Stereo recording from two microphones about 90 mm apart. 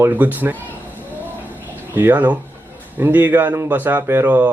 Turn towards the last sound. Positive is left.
turn(degrees=-20)  # may be behind; listen again after turning